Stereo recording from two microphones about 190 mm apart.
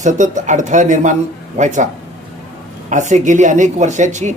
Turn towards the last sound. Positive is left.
turn(degrees=-40)  # may be behind; listen again after turning